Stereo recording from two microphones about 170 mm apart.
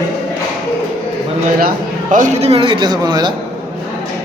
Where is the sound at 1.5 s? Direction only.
55° right (ahead or behind); by 3.3 s 25° right (ahead or behind).